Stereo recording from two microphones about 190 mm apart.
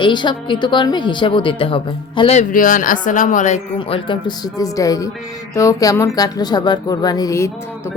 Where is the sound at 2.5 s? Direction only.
45° left (ahead or behind).